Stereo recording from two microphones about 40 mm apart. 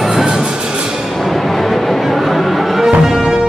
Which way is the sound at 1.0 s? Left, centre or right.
Centre.